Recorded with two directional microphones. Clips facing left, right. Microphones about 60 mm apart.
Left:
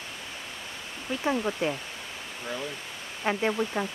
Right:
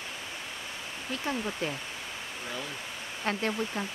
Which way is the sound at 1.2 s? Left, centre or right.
Centre.